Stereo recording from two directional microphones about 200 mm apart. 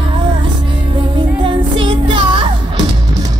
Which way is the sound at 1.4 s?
25° right (ahead or behind).